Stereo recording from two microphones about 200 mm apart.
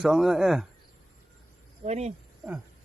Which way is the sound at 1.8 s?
30° right (ahead or behind).